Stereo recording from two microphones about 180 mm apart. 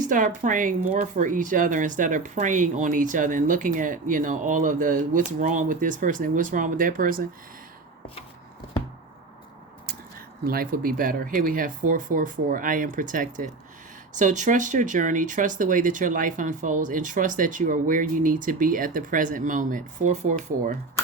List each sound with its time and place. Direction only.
0.0 s speech: 45° right (ahead or behind)
10.4 s speech: 55° right (ahead or behind)